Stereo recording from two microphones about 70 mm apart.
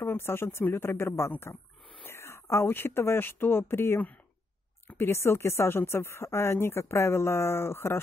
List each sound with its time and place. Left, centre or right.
0.0 s a woman's voice: left